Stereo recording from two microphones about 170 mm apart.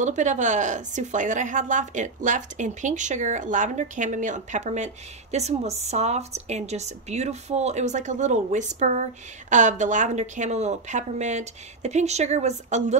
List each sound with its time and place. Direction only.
0.0 s speech: 45° right (ahead or behind)